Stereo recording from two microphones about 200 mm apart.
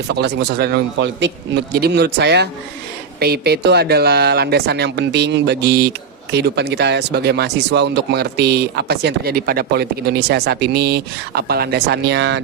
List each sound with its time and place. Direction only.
0.1 s speech: 55° right (ahead or behind)